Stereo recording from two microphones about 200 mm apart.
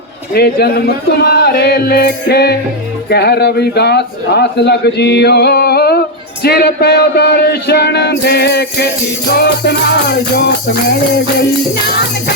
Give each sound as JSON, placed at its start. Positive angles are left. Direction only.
{"t": 0.3, "sound": "music", "side_deg": 55}
{"t": 3.1, "sound": "a man's voice", "side_deg": 55}